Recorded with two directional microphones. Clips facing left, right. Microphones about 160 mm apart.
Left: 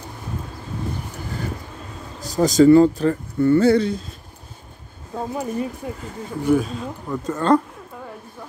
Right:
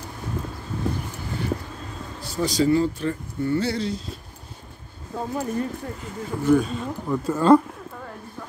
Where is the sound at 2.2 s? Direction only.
45° left (ahead or behind).